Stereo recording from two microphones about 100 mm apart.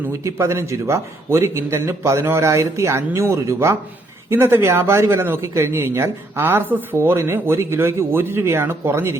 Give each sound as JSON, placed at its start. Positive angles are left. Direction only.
{"t": 0.3, "sound": "speech", "side_deg": -30}